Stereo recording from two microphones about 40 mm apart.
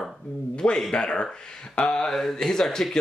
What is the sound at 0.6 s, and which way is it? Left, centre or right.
Speech, left.